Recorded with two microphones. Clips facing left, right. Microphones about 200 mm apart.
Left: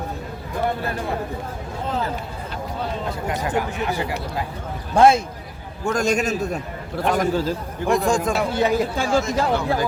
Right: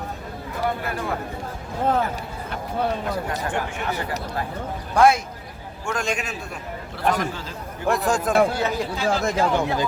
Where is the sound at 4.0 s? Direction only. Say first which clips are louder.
Left 2 dB; 10° left (ahead or behind).